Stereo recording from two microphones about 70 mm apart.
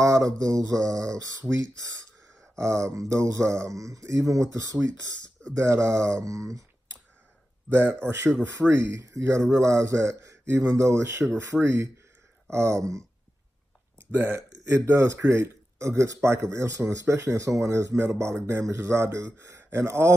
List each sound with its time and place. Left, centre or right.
0.0 s speech: right
8.0 s speech: right
13.9 s speech: right